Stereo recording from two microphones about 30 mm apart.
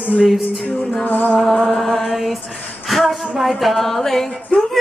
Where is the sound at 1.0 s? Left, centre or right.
Left.